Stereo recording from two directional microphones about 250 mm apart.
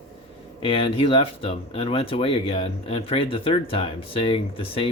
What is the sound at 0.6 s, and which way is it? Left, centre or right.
Speech, left.